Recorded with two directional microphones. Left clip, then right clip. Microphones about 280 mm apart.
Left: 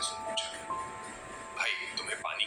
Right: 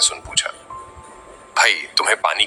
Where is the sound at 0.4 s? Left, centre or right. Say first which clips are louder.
Right 16 dB; right.